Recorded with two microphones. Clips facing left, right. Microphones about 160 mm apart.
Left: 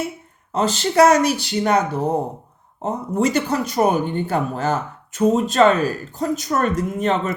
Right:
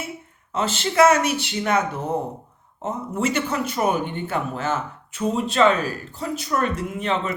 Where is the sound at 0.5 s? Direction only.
35° left (ahead or behind).